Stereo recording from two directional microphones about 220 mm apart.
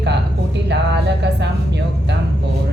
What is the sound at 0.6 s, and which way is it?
Speech, 50° right (ahead or behind).